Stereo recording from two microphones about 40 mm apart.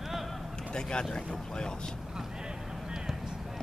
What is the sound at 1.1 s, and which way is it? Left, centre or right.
Boat, left.